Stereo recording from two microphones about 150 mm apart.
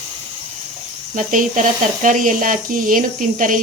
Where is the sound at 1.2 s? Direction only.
55° right (ahead or behind).